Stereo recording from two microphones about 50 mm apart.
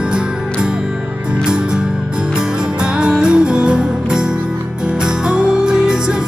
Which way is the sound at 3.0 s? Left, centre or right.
Centre.